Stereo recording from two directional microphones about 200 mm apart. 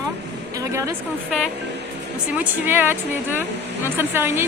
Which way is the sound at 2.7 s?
10° right (ahead or behind).